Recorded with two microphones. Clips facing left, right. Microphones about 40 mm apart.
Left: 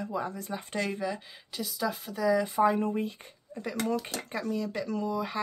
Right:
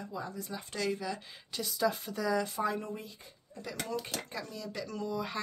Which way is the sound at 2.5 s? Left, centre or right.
Left.